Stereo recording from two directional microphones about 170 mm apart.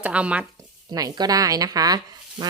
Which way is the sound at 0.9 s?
20° right (ahead or behind).